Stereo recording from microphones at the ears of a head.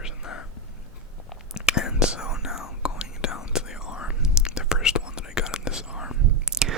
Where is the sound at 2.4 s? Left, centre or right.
Left.